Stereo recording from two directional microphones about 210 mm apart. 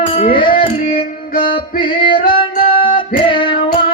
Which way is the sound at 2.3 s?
25° left (ahead or behind).